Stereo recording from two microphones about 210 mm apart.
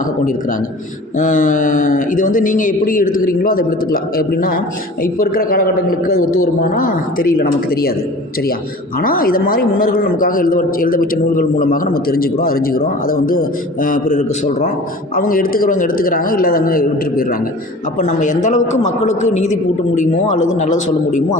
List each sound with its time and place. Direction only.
1.2 s a man's voice: 40° left (ahead or behind)
9.0 s a man's voice: 45° left (ahead or behind)